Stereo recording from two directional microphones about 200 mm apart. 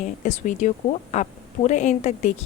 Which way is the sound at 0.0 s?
35° left (ahead or behind).